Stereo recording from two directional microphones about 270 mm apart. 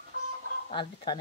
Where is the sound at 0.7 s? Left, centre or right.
Centre.